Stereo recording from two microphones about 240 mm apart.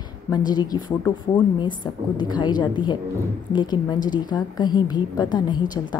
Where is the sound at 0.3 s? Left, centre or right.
Centre.